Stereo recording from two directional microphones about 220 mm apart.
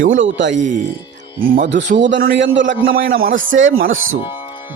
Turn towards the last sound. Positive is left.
turn(degrees=-65)  # may be behind; listen again after turning